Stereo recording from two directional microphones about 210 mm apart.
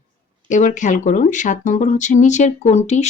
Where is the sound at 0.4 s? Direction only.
35° left (ahead or behind).